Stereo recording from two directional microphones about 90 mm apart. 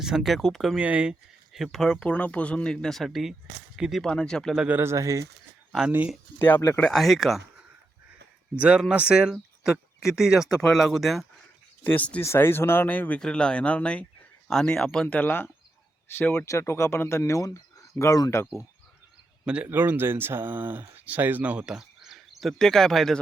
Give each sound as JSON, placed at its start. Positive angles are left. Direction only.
{"t": 0.0, "sound": "speech", "side_deg": -5}
{"t": 0.8, "sound": "speech", "side_deg": -15}
{"t": 1.5, "sound": "speech", "side_deg": 0}
{"t": 2.0, "sound": "speech", "side_deg": 15}
{"t": 4.0, "sound": "speech", "side_deg": 10}
{"t": 4.8, "sound": "speech", "side_deg": -30}
{"t": 6.9, "sound": "speech", "side_deg": 0}
{"t": 8.5, "sound": "speech", "side_deg": -10}
{"t": 11.8, "sound": "speech", "side_deg": 20}
{"t": 12.2, "sound": "speech", "side_deg": 30}
{"t": 15.0, "sound": "speech", "side_deg": 20}
{"t": 16.5, "sound": "speech", "side_deg": 30}
{"t": 19.5, "sound": "speech", "side_deg": -15}